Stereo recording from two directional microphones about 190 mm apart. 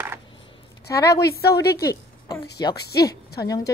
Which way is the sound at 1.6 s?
55° left (ahead or behind).